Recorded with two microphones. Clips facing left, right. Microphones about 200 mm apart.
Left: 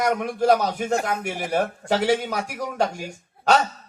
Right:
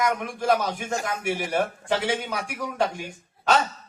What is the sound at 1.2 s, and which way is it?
A man's voice, 40° left (ahead or behind).